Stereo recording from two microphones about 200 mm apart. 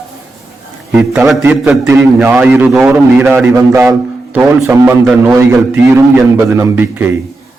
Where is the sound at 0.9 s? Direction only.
10° right (ahead or behind).